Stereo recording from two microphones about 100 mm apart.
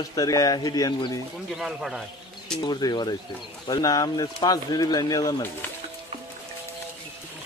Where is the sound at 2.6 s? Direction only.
45° left (ahead or behind).